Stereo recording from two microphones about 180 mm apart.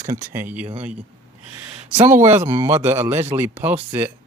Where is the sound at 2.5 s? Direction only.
15° right (ahead or behind).